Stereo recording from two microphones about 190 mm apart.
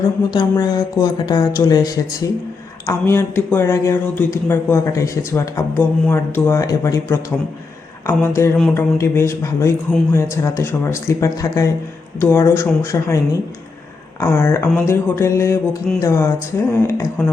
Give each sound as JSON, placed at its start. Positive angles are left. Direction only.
{"t": 0.3, "sound": "speech", "side_deg": 20}